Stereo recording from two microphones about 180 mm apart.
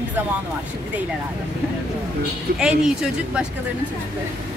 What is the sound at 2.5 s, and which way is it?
Speech, 5° right (ahead or behind).